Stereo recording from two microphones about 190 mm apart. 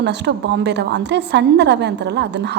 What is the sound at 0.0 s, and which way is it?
A woman's voice, 65° right (ahead or behind).